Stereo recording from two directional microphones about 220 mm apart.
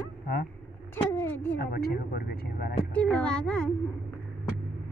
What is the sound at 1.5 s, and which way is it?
Speech, 45° left (ahead or behind).